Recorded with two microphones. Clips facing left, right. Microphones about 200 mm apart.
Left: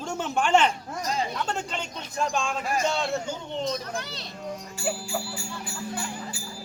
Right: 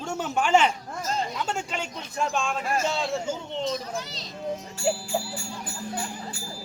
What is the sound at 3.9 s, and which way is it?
Speech, 60° left (ahead or behind).